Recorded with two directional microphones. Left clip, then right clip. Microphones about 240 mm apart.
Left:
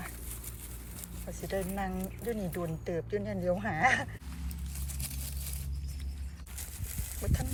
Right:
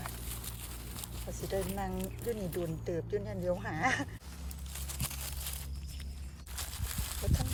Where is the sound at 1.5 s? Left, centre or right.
Centre.